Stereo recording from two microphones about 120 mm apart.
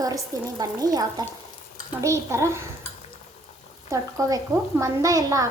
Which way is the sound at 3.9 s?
25° right (ahead or behind).